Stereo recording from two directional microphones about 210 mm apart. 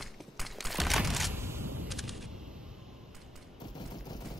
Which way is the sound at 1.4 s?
10° right (ahead or behind).